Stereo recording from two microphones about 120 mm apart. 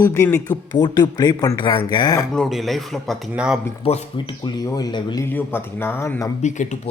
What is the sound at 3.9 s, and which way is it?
Speech, 55° left (ahead or behind).